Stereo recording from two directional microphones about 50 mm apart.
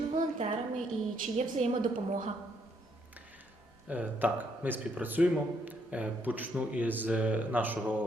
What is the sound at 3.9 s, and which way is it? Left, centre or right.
A man's voice, right.